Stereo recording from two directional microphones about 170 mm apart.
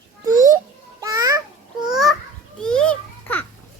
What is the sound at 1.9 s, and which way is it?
Children playing, centre (ahead or behind).